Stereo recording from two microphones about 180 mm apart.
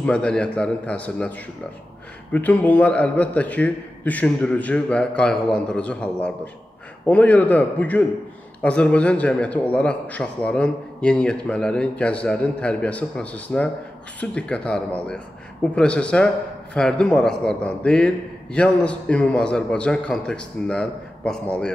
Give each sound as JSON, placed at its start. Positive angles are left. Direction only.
{"t": 0.0, "sound": "a man's voice", "side_deg": 5}
{"t": 2.3, "sound": "a man's voice", "side_deg": 10}
{"t": 7.1, "sound": "a man's voice", "side_deg": 10}